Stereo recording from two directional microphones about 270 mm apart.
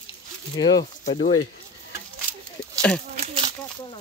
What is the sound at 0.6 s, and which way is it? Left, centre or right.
Speech, centre.